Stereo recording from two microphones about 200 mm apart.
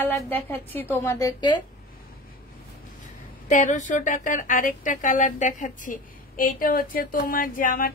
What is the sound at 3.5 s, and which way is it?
A woman's voice, 40° left (ahead or behind).